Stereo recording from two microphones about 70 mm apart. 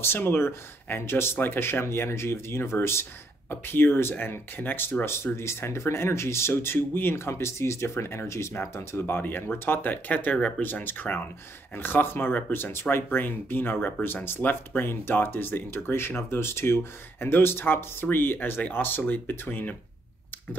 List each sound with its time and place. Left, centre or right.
0.0 s speech: left